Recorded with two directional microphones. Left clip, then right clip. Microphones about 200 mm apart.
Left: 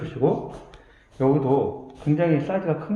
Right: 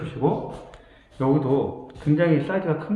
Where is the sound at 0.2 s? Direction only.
20° left (ahead or behind).